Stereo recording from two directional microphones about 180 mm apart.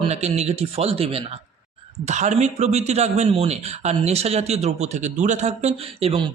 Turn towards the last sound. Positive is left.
turn(degrees=-30)  # may be behind; listen again after turning